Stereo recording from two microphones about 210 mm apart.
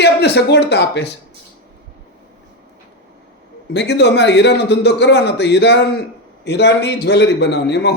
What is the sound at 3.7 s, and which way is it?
A man's voice, 55° left (ahead or behind).